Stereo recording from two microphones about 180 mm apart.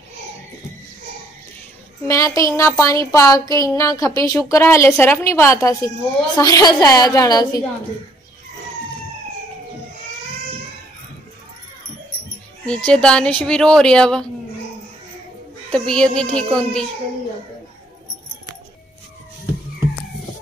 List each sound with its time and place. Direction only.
2.0 s a woman's voice: 15° left (ahead or behind)
12.6 s speech: 5° left (ahead or behind)
15.7 s speech: 5° left (ahead or behind)